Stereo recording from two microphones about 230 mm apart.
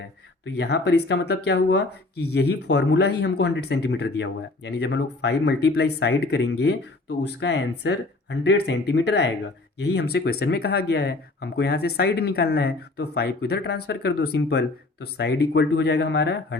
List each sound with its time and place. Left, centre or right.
0.4 s speech: left